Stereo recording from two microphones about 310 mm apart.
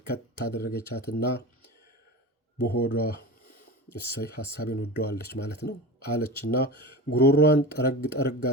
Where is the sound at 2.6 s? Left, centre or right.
Left.